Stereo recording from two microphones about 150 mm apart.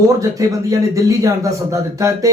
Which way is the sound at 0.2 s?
20° right (ahead or behind).